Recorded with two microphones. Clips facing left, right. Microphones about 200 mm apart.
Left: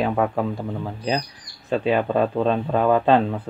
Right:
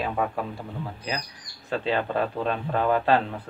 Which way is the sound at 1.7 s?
15° left (ahead or behind).